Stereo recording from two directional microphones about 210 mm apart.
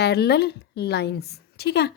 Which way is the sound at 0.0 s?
50° left (ahead or behind).